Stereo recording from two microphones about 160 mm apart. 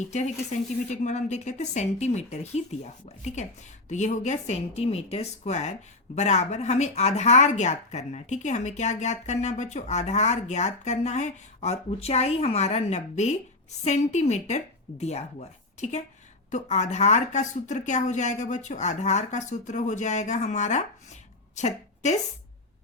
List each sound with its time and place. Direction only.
0.1 s a woman's voice: 45° left (ahead or behind)